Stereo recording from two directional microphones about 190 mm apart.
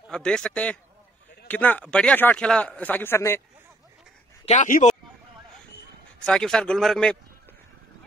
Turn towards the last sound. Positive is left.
turn(degrees=5)  # may be behind; listen again after turning